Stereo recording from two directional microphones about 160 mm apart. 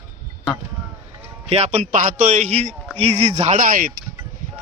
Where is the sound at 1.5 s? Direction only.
45° right (ahead or behind).